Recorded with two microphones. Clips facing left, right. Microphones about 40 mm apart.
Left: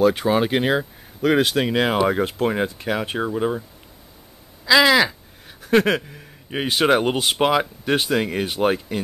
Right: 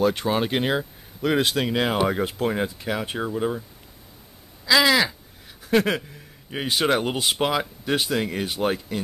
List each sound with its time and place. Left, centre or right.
0.0 s speech: centre
4.6 s speech: centre